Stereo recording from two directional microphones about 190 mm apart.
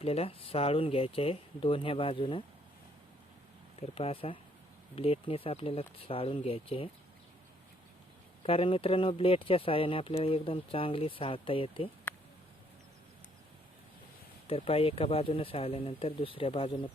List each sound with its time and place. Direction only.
0.0 s speech: 30° left (ahead or behind)
3.8 s speech: 30° left (ahead or behind)
8.4 s speech: 30° left (ahead or behind)
12.1 s a sound: 10° left (ahead or behind)
14.4 s speech: 30° left (ahead or behind)